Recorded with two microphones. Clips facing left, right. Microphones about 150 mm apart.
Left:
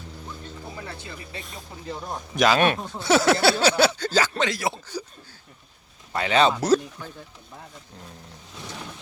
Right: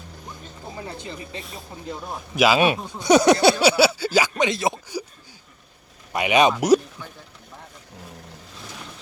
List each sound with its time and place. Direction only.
0.8 s speech: 20° right (ahead or behind)
2.0 s speech: 5° right (ahead or behind)
6.1 s speech: 15° right (ahead or behind)